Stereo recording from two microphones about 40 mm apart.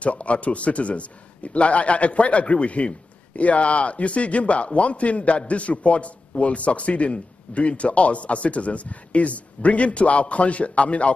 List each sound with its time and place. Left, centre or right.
0.0 s a man's voice: left